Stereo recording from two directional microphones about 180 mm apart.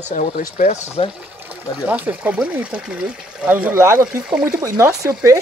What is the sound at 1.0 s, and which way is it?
Speech, 35° left (ahead or behind).